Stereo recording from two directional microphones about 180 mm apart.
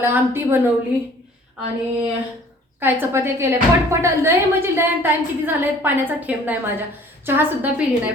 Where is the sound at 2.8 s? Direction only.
10° right (ahead or behind).